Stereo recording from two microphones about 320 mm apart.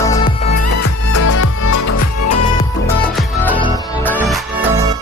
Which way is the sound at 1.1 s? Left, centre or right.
Left.